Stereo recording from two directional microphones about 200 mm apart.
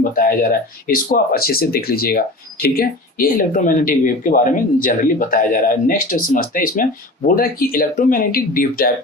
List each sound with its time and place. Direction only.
0.0 s speech: 45° left (ahead or behind)